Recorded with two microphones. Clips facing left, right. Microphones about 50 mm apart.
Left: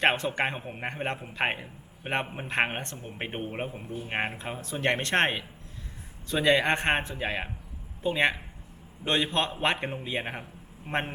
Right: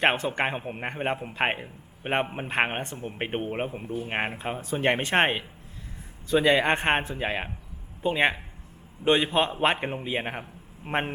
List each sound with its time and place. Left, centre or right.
0.0 s a man's voice: centre